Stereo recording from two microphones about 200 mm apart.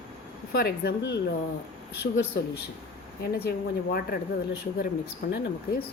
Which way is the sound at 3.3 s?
50° left (ahead or behind).